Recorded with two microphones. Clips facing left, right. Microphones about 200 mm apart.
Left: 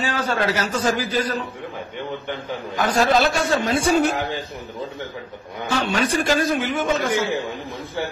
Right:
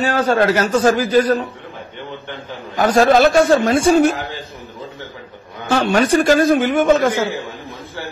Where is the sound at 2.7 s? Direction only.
45° right (ahead or behind).